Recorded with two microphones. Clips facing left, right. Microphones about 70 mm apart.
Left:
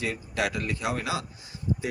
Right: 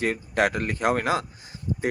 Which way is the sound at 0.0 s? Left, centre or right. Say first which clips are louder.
Right 6 dB; right.